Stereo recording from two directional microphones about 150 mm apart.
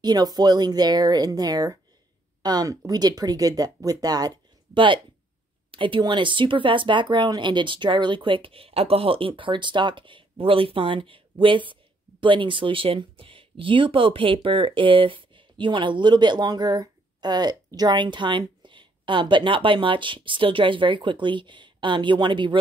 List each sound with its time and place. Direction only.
0.0 s speech: 25° right (ahead or behind)